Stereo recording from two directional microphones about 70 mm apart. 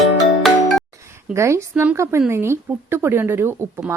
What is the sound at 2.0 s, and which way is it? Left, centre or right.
A woman's voice, right.